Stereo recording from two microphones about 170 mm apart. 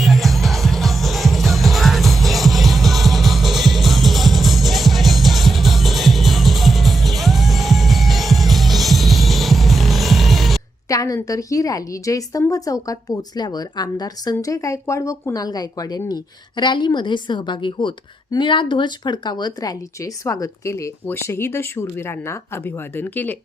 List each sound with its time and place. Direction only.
0.0 s music: centre (ahead or behind)
10.8 s a woman's voice: 20° left (ahead or behind)